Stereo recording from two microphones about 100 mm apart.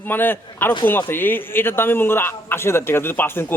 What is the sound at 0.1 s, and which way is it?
A man's voice, 20° left (ahead or behind).